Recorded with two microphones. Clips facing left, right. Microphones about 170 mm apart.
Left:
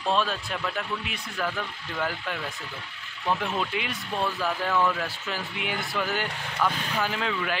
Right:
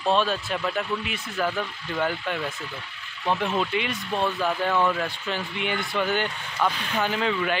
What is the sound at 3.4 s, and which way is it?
A man's voice, centre (ahead or behind).